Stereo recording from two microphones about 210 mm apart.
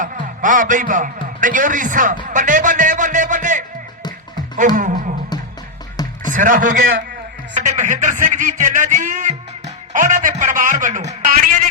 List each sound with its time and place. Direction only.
0.0 s a man's voice: 40° right (ahead or behind)
2.3 s music: 40° right (ahead or behind)
6.0 s music: 20° left (ahead or behind)
6.3 s a man's voice: 40° right (ahead or behind)
7.5 s music: 35° right (ahead or behind)
11.1 s a sound: 40° right (ahead or behind)